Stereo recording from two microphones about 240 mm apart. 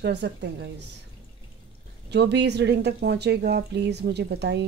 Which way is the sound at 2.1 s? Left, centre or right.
Right.